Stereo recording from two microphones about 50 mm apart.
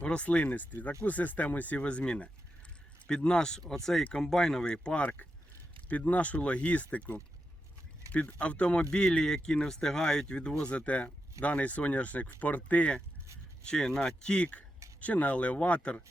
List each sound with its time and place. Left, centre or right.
0.0 s speech: left
5.0 s speech: left
13.7 s speech: centre